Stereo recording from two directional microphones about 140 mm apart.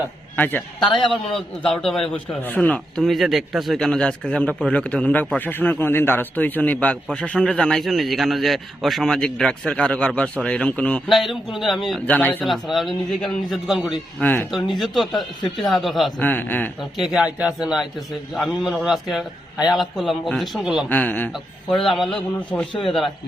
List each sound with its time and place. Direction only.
0.3 s a man's voice: 10° left (ahead or behind)
12.0 s speech: 10° left (ahead or behind)
12.5 s speech: centre (ahead or behind)
14.2 s speech: 15° left (ahead or behind)
14.5 s speech: centre (ahead or behind)
16.2 s speech: 15° left (ahead or behind)
17.0 s speech: 5° right (ahead or behind)
20.9 s speech: 10° left (ahead or behind)
21.7 s speech: centre (ahead or behind)
22.7 s speech: 35° left (ahead or behind)